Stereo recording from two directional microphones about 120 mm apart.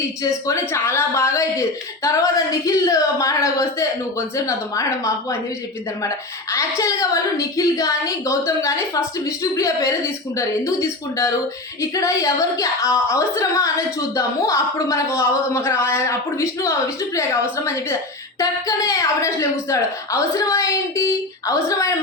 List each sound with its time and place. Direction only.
0.2 s a woman's voice: 25° left (ahead or behind)
18.3 s a woman's voice: 30° left (ahead or behind)